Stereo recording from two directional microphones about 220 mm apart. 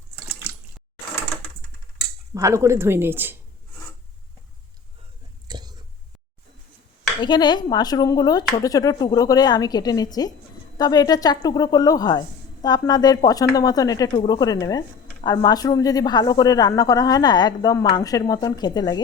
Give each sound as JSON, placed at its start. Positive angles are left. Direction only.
{"t": 0.3, "sound": "water", "side_deg": -5}
{"t": 2.3, "sound": "speech", "side_deg": -15}
{"t": 5.5, "sound": "whispering", "side_deg": -20}
{"t": 7.2, "sound": "speech", "side_deg": 20}